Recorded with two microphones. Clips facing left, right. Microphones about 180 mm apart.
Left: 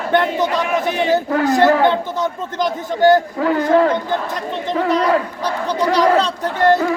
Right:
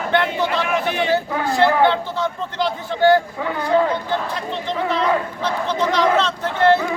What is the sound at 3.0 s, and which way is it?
Speech, 45° left (ahead or behind).